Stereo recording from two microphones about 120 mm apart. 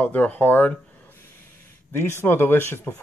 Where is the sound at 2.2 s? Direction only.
20° left (ahead or behind).